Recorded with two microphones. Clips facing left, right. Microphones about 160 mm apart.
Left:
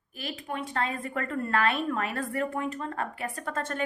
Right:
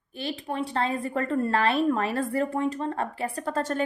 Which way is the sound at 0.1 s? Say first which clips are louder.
Right 4 dB; 30° right (ahead or behind).